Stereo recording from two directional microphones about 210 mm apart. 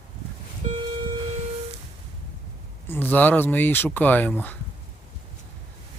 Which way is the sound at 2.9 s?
10° left (ahead or behind).